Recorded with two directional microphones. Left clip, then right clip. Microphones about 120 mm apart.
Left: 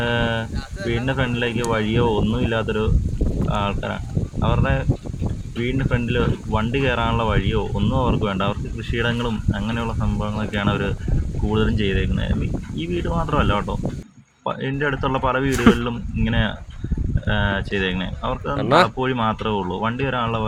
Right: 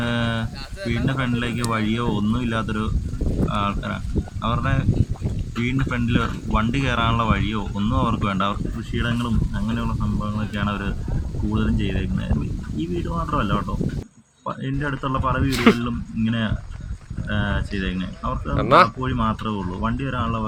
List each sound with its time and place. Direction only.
0.0 s a sound: 5° right (ahead or behind)
0.9 s speech: centre (ahead or behind)
9.2 s speech: 15° left (ahead or behind)
15.4 s speech: 45° left (ahead or behind)
15.7 s speech: 20° left (ahead or behind)
18.5 s speech: 40° left (ahead or behind)
19.0 s speech: 20° left (ahead or behind)